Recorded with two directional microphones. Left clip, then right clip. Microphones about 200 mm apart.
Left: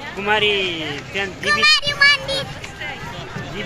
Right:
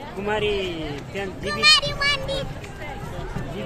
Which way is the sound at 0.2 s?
20° left (ahead or behind).